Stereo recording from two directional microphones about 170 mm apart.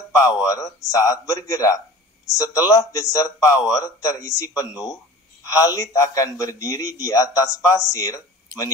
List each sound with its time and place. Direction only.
0.2 s a man's voice: 20° left (ahead or behind)